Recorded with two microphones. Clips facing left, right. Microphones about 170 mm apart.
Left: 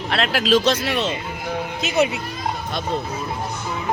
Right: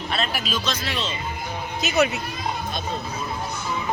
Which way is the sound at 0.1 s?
90° left.